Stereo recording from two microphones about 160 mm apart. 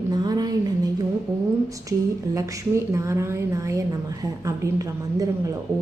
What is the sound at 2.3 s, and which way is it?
A woman's voice, 20° right (ahead or behind).